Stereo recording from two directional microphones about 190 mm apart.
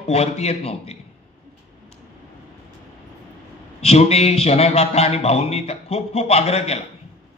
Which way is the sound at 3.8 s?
35° left (ahead or behind).